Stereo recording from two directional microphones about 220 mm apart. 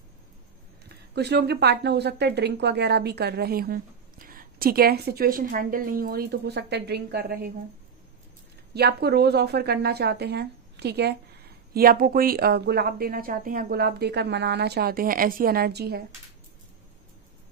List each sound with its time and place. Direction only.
1.1 s a woman's voice: 50° right (ahead or behind)
8.7 s a woman's voice: 45° right (ahead or behind)